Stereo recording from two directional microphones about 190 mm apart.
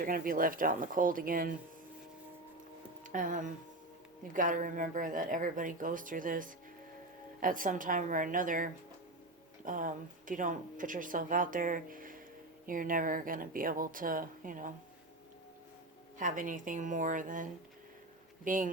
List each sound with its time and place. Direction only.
0.0 s speech: 45° right (ahead or behind)
3.0 s speech: 45° right (ahead or behind)
16.1 s speech: 45° right (ahead or behind)